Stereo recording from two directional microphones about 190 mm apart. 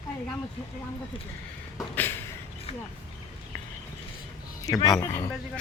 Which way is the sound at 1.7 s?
10° left (ahead or behind).